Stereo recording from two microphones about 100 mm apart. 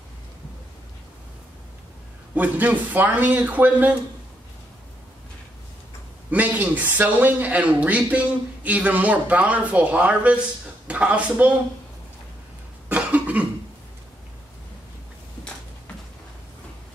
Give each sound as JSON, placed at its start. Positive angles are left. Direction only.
{"t": 2.3, "sound": "speech", "side_deg": -15}
{"t": 6.3, "sound": "speech", "side_deg": -15}
{"t": 12.8, "sound": "cough", "side_deg": -15}